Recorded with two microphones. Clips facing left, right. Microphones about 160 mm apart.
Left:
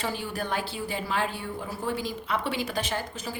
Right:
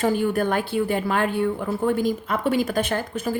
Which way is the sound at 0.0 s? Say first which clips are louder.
Right 11 dB; 50° right (ahead or behind).